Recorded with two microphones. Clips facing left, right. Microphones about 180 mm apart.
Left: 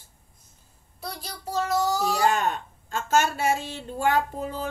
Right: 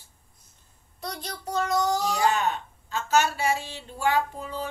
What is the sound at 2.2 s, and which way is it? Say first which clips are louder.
A woman's voice: left 1 dB; 50° left (ahead or behind).